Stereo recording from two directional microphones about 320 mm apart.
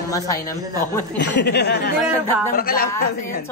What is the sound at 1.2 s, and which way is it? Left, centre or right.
Speech, left.